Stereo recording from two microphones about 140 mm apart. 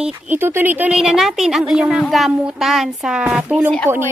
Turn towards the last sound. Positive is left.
turn(degrees=-10)  # may be behind; listen again after turning